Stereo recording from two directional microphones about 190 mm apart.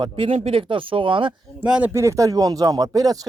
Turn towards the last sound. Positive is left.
turn(degrees=-20)  # may be behind; listen again after turning